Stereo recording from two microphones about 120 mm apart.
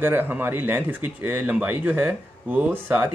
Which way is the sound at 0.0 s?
15° right (ahead or behind).